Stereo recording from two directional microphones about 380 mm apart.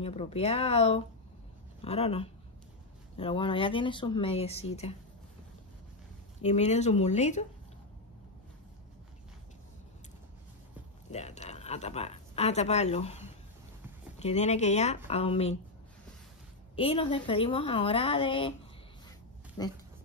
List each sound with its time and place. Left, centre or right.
0.0 s speech: centre
6.4 s speech: centre
11.1 s speech: centre
16.7 s speech: centre
19.6 s speech: centre